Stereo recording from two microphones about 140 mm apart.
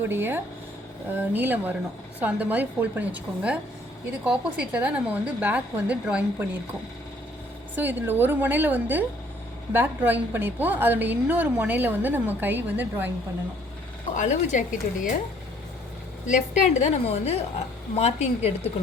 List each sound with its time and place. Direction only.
0.1 s a woman's voice: 15° right (ahead or behind)
7.8 s a woman's voice: 15° right (ahead or behind)
14.2 s a woman's voice: 60° left (ahead or behind)
16.2 s a woman's voice: 55° left (ahead or behind)